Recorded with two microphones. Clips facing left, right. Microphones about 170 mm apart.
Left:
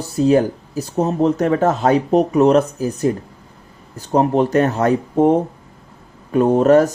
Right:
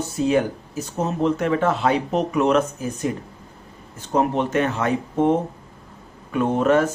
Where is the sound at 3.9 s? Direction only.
35° left (ahead or behind).